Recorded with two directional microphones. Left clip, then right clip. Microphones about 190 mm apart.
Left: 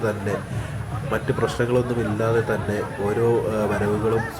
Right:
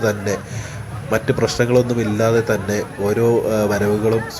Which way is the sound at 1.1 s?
10° right (ahead or behind).